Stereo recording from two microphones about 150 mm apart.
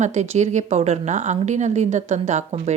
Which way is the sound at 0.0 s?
50° right (ahead or behind).